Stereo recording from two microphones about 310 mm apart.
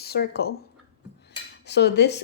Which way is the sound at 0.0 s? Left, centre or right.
Left.